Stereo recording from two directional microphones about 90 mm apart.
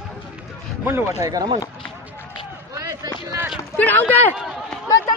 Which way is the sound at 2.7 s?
40° right (ahead or behind).